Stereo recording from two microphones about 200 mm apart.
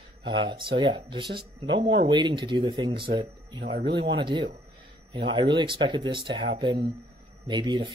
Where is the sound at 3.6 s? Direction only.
55° right (ahead or behind).